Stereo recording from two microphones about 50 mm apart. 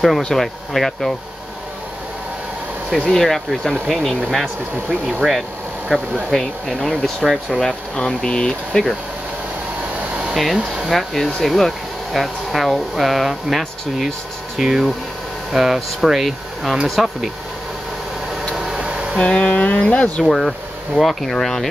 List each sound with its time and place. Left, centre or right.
0.2 s speech: centre
3.1 s speech: centre
7.6 s speech: centre
10.3 s speech: centre
18.6 s vehicle: centre
18.9 s a sound: centre
19.1 s speech: centre
20.2 s speech: centre